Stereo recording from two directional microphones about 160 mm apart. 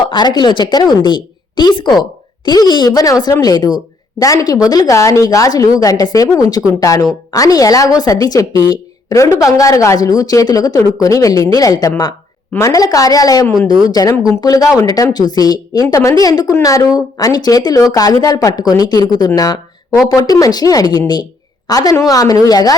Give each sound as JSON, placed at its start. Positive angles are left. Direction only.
{"t": 0.1, "sound": "speech", "side_deg": 25}